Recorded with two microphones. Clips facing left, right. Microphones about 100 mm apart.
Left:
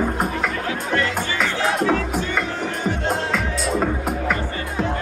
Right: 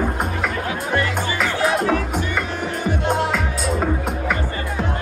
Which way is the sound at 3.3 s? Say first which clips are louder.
Even; centre (ahead or behind).